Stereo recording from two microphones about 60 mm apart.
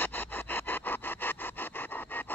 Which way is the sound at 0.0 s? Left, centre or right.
Left.